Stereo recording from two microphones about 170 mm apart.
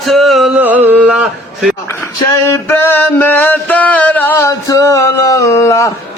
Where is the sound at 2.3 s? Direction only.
15° left (ahead or behind).